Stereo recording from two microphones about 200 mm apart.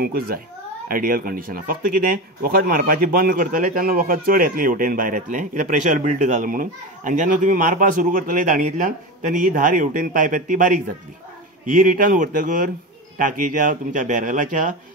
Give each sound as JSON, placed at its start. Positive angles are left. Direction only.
{"t": 0.0, "sound": "speech", "side_deg": -50}